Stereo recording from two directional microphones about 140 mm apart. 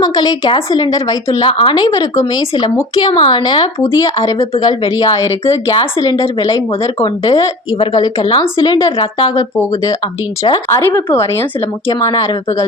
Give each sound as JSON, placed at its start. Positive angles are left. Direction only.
{"t": 0.0, "sound": "speech", "side_deg": 30}
{"t": 1.3, "sound": "a woman's voice", "side_deg": 40}
{"t": 7.0, "sound": "a woman's voice", "side_deg": 35}